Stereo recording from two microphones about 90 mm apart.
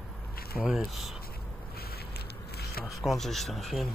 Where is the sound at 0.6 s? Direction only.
5° right (ahead or behind).